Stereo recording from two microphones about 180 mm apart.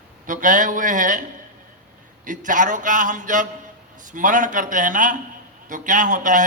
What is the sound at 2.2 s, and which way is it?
A man's voice, 45° right (ahead or behind).